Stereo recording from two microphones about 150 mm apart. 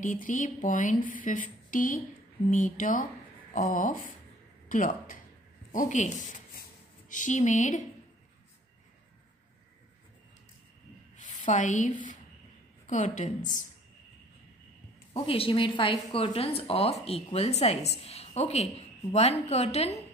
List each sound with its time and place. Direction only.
0.0 s speech: 60° left (ahead or behind)
11.1 s a woman's voice: 55° left (ahead or behind)
15.1 s a woman's voice: 40° left (ahead or behind)